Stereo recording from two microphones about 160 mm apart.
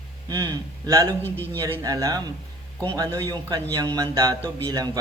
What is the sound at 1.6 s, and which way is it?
Speech, 20° right (ahead or behind).